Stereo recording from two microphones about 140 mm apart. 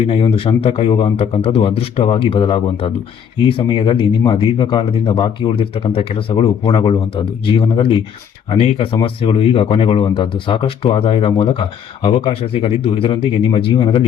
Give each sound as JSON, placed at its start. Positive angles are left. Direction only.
{"t": 0.1, "sound": "speech", "side_deg": 40}